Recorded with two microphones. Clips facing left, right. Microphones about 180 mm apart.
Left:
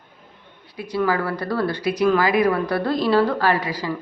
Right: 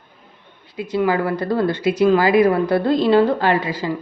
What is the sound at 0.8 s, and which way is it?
Speech, 20° right (ahead or behind).